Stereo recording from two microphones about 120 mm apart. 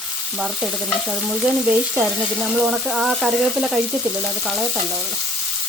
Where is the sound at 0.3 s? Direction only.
5° right (ahead or behind).